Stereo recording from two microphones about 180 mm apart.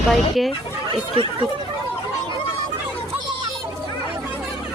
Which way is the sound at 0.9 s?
30° right (ahead or behind).